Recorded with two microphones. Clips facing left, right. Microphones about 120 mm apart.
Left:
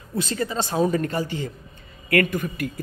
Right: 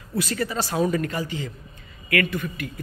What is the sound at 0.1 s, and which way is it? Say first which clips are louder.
A man's voice: even; 25° left (ahead or behind).